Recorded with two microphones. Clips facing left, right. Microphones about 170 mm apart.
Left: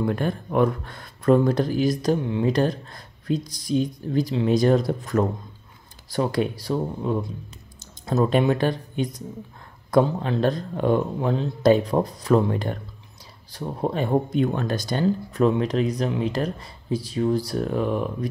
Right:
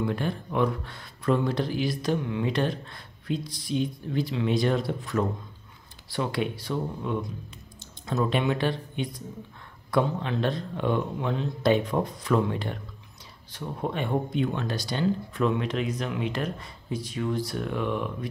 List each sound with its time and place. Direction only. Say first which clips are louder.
0.0 s speech: left 4 dB; 45° left (ahead or behind)